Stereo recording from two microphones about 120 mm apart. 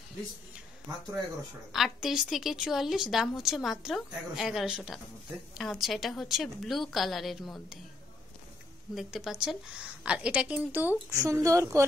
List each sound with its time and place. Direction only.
1.7 s a woman's voice: centre (ahead or behind)
8.9 s a woman's voice: 5° right (ahead or behind)
11.1 s a woman's voice: 25° right (ahead or behind)